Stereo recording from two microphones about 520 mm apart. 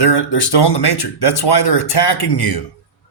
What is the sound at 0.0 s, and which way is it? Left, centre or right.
Speech, left.